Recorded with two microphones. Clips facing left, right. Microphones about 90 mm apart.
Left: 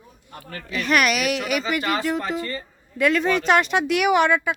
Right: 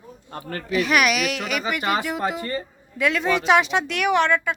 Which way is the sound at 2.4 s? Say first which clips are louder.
Right 1 dB; 20° right (ahead or behind).